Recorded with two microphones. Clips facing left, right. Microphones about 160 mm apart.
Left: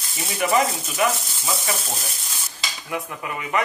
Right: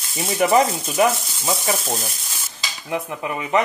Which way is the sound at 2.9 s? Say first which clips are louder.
Right 4 dB; 25° right (ahead or behind).